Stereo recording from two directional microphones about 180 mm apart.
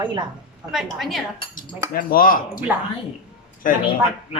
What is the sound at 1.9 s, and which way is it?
Speech, 50° left (ahead or behind).